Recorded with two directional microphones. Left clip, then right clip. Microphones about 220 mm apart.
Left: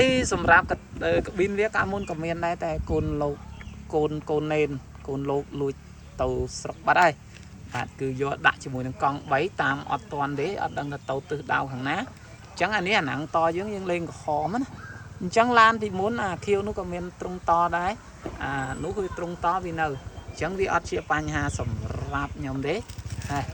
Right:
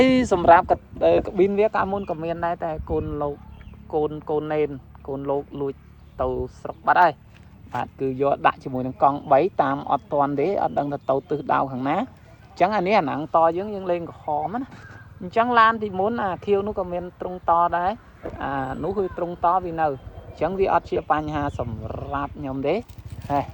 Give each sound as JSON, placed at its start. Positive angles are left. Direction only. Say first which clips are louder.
{"t": 0.0, "sound": "speech", "louder": "right 5 dB", "side_deg": -35}
{"t": 7.7, "sound": "speech", "louder": "right 4 dB", "side_deg": -15}